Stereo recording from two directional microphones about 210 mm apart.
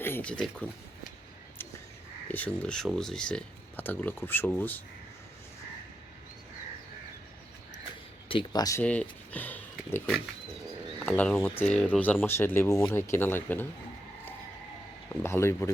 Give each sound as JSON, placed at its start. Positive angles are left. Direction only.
{"t": 0.0, "sound": "speech", "side_deg": 10}
{"t": 2.2, "sound": "speech", "side_deg": 5}
{"t": 8.3, "sound": "speech", "side_deg": 20}
{"t": 8.8, "sound": "speech", "side_deg": 5}
{"t": 15.1, "sound": "speech", "side_deg": 10}